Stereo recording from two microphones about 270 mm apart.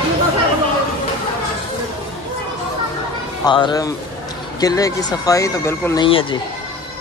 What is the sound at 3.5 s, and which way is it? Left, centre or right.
Speech, centre.